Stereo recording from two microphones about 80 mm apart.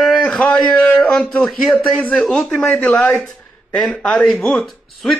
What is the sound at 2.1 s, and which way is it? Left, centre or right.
Speech, centre.